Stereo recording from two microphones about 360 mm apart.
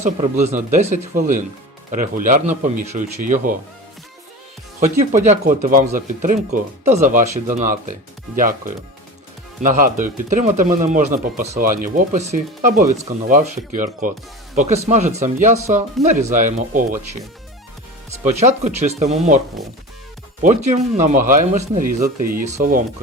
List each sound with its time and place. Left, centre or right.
0.0 s speech: centre
4.8 s speech: centre
18.2 s speech: centre
20.4 s speech: centre